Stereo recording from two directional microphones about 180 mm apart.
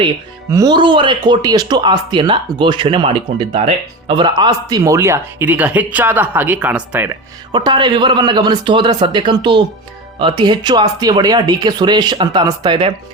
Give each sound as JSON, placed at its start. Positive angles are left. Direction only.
{"t": 0.5, "sound": "speech", "side_deg": -20}
{"t": 7.5, "sound": "speech", "side_deg": -25}